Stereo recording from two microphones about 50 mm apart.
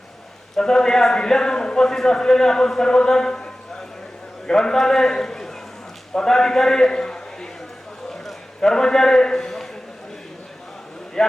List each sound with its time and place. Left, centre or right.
0.5 s a man's voice: centre
8.1 s a sound: centre
11.2 s speech: centre